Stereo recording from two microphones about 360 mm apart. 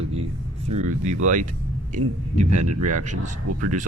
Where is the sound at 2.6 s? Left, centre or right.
Right.